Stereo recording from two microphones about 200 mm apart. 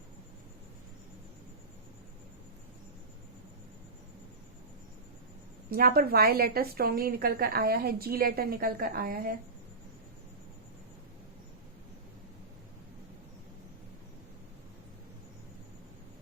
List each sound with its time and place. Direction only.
5.7 s a woman's voice: 50° right (ahead or behind)